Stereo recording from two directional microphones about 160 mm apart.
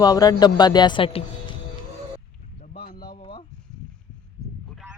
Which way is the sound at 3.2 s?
35° left (ahead or behind).